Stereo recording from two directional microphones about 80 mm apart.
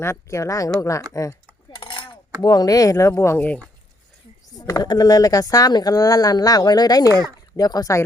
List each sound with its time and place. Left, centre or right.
0.0 s speech: left
1.7 s chink: left
2.4 s speech: left
4.4 s a sound: left
4.8 s speech: left